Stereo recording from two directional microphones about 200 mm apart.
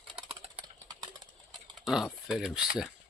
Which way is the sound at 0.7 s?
20° right (ahead or behind).